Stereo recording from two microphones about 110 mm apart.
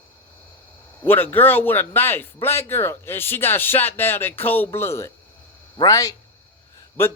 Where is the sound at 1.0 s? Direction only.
20° left (ahead or behind); by 6.1 s 35° left (ahead or behind).